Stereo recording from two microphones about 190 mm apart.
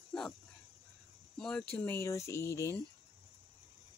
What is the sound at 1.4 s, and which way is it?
Speech, 5° left (ahead or behind).